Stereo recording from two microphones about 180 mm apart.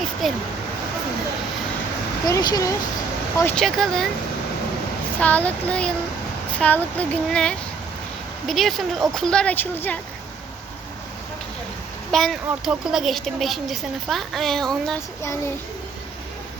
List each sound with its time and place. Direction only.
0.0 s a sound: centre (ahead or behind)
2.2 s speech: 20° left (ahead or behind)
3.5 s a woman's voice: centre (ahead or behind)
5.2 s a woman's voice: 10° left (ahead or behind)
12.1 s a woman's voice: centre (ahead or behind)